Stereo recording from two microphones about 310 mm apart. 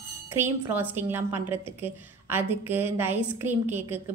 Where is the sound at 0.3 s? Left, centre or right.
Centre.